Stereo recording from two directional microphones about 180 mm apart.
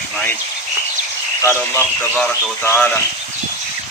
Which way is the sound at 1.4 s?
10° left (ahead or behind).